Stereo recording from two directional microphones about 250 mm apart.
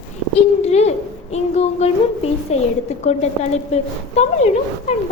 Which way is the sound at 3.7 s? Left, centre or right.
Left.